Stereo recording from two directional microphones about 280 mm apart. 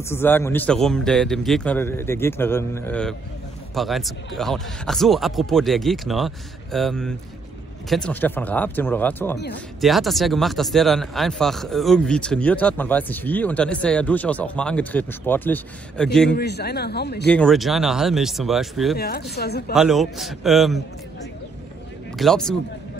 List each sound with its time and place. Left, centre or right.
0.1 s speech: centre
16.3 s speech: left
17.3 s speech: centre
18.9 s speech: left
19.7 s speech: centre
22.1 s speech: centre